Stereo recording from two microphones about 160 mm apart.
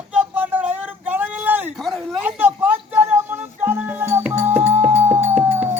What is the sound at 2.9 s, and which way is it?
Music, 10° right (ahead or behind).